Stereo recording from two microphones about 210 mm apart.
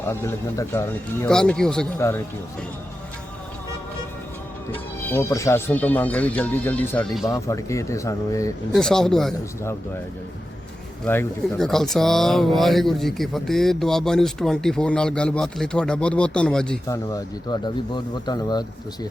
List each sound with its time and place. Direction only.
0.0 s speech: 10° left (ahead or behind)
4.7 s speech: 10° left (ahead or behind)
7.3 s speech: 15° left (ahead or behind)
8.7 s speech: 5° left (ahead or behind)
11.0 s speech: 5° left (ahead or behind)
16.9 s speech: 15° left (ahead or behind)